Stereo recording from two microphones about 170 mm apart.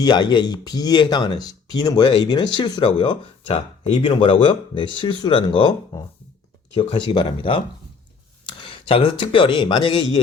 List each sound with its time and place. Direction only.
0.0 s speech: 25° left (ahead or behind)